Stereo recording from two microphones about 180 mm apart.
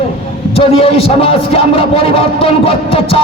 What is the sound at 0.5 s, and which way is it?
A man's voice, 30° left (ahead or behind).